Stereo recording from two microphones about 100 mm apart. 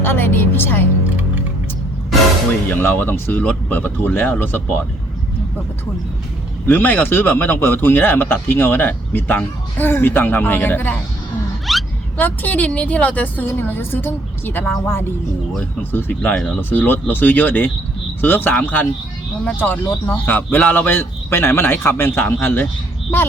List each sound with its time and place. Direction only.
0.0 s a woman's voice: 20° left (ahead or behind)
2.6 s a man's voice: 20° left (ahead or behind)
6.7 s a man's voice: 20° left (ahead or behind)
11.6 s a sound: centre (ahead or behind)
12.1 s a woman's voice: 15° left (ahead or behind)
15.8 s a man's voice: 20° left (ahead or behind)
16.3 s speech: centre (ahead or behind)
16.6 s a man's voice: 20° left (ahead or behind)